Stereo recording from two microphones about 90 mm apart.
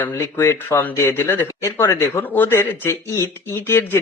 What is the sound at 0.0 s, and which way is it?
Speech, 30° left (ahead or behind).